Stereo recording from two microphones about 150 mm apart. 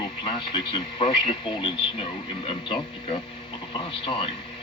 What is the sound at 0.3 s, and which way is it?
A man's voice, 35° left (ahead or behind).